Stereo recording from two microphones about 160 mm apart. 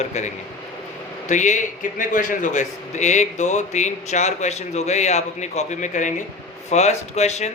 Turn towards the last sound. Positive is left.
turn(degrees=45)  # may be behind; listen again after turning